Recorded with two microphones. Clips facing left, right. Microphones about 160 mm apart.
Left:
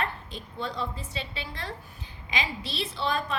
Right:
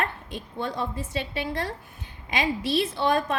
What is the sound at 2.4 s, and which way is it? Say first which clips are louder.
Speech: right 8 dB; 50° right (ahead or behind).